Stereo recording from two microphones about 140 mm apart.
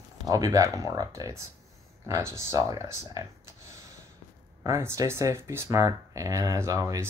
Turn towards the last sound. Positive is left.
turn(degrees=-25)  # may be behind; listen again after turning